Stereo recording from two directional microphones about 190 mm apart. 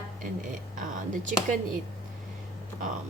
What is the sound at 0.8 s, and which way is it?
Speech, 45° right (ahead or behind).